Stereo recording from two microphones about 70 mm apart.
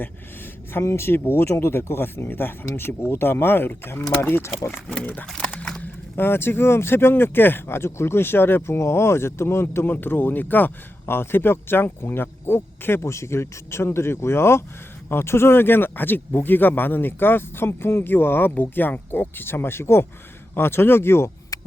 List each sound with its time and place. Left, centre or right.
0.7 s speech: left
4.9 s speech: left
5.2 s speech: centre
5.8 s speech: left
21.5 s hum: left